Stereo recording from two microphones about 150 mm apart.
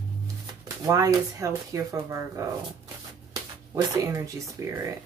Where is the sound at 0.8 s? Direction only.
20° right (ahead or behind).